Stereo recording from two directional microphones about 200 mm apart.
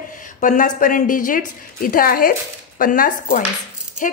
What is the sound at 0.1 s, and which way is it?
Speech, 40° left (ahead or behind).